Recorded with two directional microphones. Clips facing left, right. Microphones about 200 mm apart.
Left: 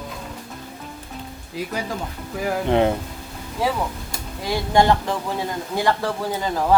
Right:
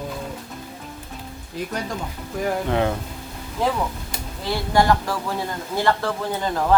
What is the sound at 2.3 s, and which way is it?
Speech, 5° left (ahead or behind).